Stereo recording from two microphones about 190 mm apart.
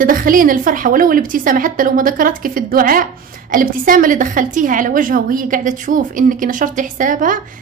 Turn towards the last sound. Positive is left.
turn(degrees=-45)  # may be behind; listen again after turning